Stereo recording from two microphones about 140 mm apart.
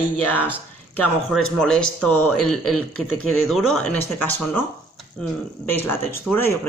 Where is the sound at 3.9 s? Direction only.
10° left (ahead or behind).